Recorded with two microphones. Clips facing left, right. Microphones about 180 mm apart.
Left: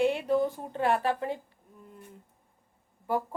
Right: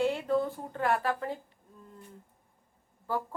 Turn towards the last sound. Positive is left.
turn(degrees=20)  # may be behind; listen again after turning